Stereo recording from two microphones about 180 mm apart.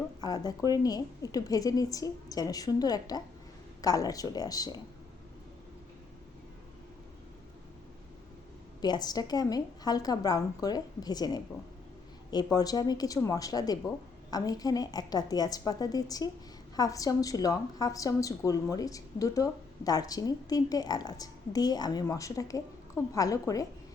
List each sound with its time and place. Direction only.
0.2 s a sound: 20° left (ahead or behind)
0.7 s a woman's voice: 20° left (ahead or behind)
8.8 s a woman's voice: 20° left (ahead or behind)